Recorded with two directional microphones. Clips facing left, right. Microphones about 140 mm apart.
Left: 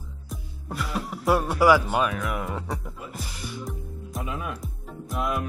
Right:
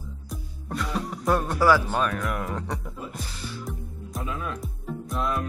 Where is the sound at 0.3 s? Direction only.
5° left (ahead or behind).